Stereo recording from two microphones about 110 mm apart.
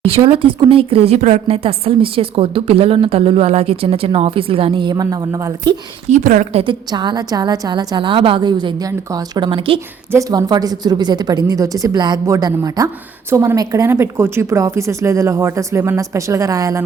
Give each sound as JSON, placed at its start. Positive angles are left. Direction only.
{"t": 0.3, "sound": "a woman's voice", "side_deg": -55}
{"t": 6.1, "sound": "a woman's voice", "side_deg": -90}
{"t": 6.9, "sound": "a woman's voice", "side_deg": -40}
{"t": 10.1, "sound": "a woman's voice", "side_deg": -30}